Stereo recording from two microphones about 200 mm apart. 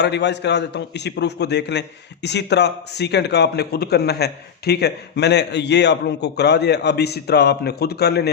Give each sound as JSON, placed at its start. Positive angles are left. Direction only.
{"t": 0.0, "sound": "a man's voice", "side_deg": 60}